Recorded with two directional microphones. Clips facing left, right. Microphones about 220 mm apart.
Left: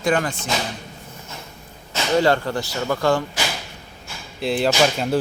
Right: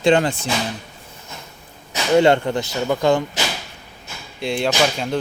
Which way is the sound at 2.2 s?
25° right (ahead or behind).